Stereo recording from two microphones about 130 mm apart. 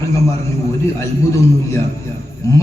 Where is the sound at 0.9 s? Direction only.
20° left (ahead or behind).